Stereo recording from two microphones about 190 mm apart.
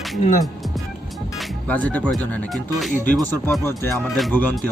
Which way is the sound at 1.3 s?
5° left (ahead or behind).